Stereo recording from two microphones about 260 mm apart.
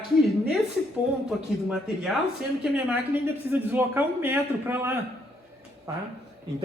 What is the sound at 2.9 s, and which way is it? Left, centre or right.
A man's voice, centre.